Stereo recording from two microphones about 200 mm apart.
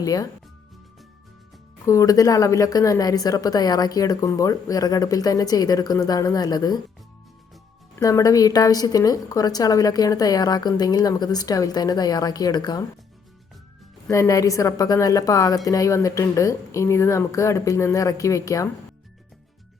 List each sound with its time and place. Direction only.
0.0 s a woman's voice: 15° left (ahead or behind)
1.9 s a woman's voice: 15° left (ahead or behind)
7.9 s a woman's voice: 15° left (ahead or behind)
14.1 s a woman's voice: 15° left (ahead or behind)